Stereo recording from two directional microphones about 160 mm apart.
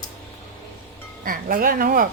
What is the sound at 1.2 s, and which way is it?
Speech, 60° right (ahead or behind).